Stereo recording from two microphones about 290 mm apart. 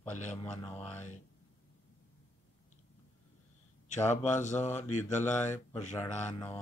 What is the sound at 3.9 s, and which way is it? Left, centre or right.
Speech, left.